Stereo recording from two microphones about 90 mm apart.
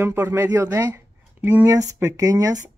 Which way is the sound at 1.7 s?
40° right (ahead or behind).